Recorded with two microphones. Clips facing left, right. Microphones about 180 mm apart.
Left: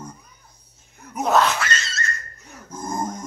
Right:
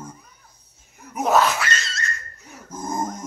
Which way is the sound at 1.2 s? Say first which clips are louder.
Even; 5° right (ahead or behind).